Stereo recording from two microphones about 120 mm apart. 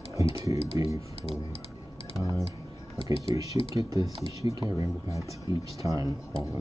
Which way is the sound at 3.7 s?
30° right (ahead or behind).